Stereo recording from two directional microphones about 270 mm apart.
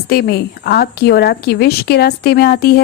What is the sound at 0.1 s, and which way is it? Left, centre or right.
A woman's voice, left.